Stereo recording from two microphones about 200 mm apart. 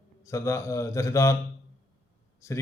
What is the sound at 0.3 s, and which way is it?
A man's voice, 15° left (ahead or behind).